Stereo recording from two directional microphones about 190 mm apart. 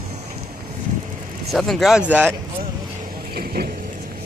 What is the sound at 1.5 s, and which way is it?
Speech, centre (ahead or behind).